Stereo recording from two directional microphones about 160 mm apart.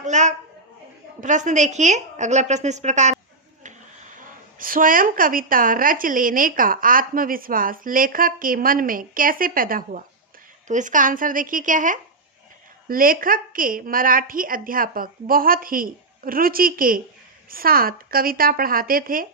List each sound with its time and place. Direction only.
0.0 s a woman's voice: 50° right (ahead or behind)
4.2 s a woman's voice: 60° right (ahead or behind)
10.7 s a woman's voice: 50° right (ahead or behind)